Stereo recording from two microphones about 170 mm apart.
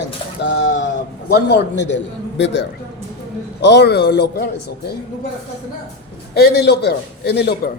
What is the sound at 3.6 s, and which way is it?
Speech, 90° left.